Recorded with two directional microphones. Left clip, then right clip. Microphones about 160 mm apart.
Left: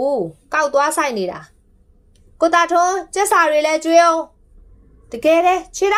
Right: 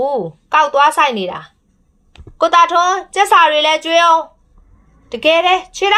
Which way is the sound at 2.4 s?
15° left (ahead or behind).